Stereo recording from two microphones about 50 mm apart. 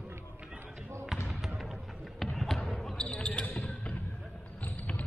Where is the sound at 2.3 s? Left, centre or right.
Centre.